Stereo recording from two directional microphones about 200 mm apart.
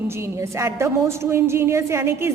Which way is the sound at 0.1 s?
15° right (ahead or behind).